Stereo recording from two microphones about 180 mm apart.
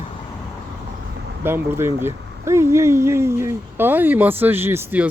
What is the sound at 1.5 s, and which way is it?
Speech, 15° right (ahead or behind).